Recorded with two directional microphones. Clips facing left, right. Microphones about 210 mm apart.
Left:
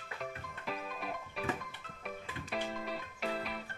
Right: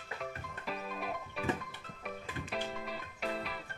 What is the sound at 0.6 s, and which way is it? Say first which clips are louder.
Music: right 1 dB; centre (ahead or behind).